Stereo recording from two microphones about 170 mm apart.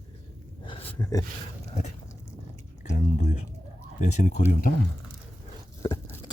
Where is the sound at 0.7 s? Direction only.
35° left (ahead or behind).